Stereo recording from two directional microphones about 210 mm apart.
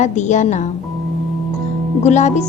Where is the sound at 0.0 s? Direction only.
35° left (ahead or behind).